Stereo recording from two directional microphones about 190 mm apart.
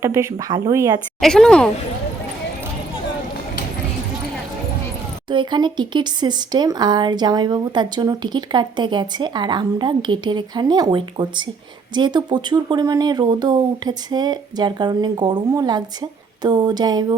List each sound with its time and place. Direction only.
0.0 s speech: 15° right (ahead or behind)
1.2 s a woman's voice: 5° left (ahead or behind)
5.3 s speech: 25° right (ahead or behind)